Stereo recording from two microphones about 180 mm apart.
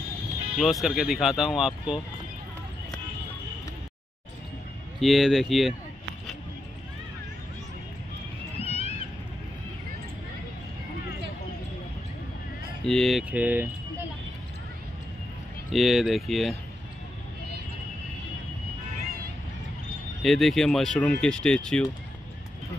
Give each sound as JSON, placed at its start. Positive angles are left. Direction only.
{"t": 0.6, "sound": "speech", "side_deg": 0}
{"t": 5.0, "sound": "speech", "side_deg": 0}
{"t": 8.5, "sound": "cat", "side_deg": 35}
{"t": 12.8, "sound": "speech", "side_deg": 0}
{"t": 15.7, "sound": "speech", "side_deg": 0}
{"t": 20.2, "sound": "speech", "side_deg": 0}